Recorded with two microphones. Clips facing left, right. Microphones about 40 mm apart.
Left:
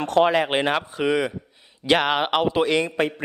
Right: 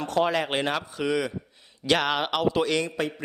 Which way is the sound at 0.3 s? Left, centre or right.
Left.